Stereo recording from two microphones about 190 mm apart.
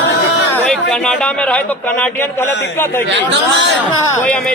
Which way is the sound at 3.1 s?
75° right (ahead or behind).